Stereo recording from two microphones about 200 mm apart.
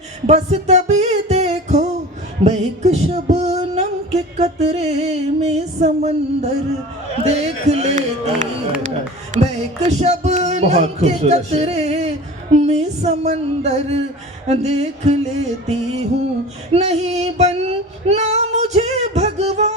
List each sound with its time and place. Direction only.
0.3 s music: 35° right (ahead or behind)
9.3 s speech: 35° right (ahead or behind)
12.5 s music: 35° right (ahead or behind)
16.7 s female singing: 35° right (ahead or behind)